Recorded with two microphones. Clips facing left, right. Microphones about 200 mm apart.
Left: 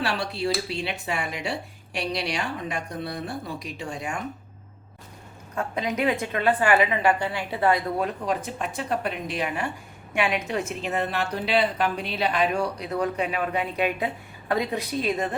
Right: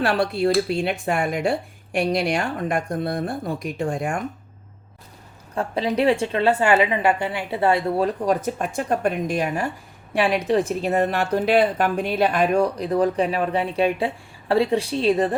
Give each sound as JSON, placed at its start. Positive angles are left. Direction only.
{"t": 0.0, "sound": "speech", "side_deg": -55}
{"t": 5.5, "sound": "a woman's voice", "side_deg": -30}
{"t": 12.9, "sound": "a woman's voice", "side_deg": -35}